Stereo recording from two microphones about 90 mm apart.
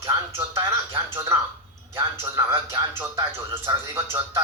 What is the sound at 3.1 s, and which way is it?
Speech, 25° right (ahead or behind).